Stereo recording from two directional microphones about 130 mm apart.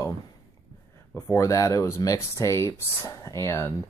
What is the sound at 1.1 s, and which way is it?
Speech, 20° left (ahead or behind).